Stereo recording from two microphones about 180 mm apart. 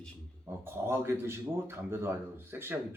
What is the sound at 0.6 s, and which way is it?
A man's voice, 15° right (ahead or behind).